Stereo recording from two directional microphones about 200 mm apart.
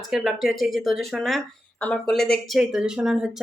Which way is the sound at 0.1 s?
Centre (ahead or behind).